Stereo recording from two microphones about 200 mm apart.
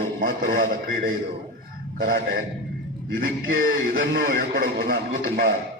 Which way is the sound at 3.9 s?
60° right (ahead or behind).